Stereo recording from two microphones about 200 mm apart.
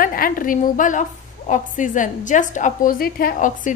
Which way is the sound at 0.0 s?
45° left (ahead or behind).